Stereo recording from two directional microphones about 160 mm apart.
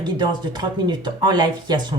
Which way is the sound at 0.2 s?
25° right (ahead or behind).